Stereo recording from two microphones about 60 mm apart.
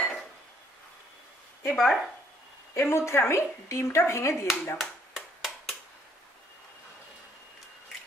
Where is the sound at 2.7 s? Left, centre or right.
Left.